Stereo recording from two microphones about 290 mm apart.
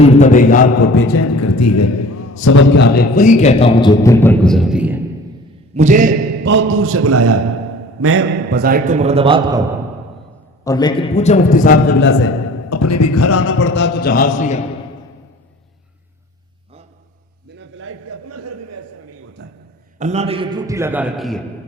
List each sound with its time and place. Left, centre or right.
0.2 s a man's voice: left
0.9 s a man's voice: left; by 4.9 s centre
5.7 s a man's voice: right
8.5 s a man's voice: right; by 9.6 s centre
10.6 s a man's voice: centre; by 12.3 s left
12.7 s a man's voice: left
17.5 s a sound: right
19.4 s a sound: right
20.0 s a man's voice: right; by 21.4 s centre